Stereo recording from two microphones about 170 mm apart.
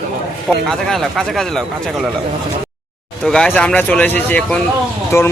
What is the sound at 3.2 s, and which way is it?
A man's voice, 5° left (ahead or behind).